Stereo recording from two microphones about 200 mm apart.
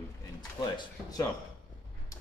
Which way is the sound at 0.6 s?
20° left (ahead or behind).